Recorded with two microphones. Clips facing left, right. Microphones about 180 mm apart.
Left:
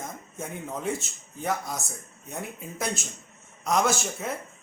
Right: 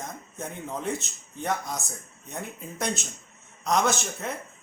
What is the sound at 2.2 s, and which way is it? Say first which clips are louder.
Speech: even; 5° left (ahead or behind).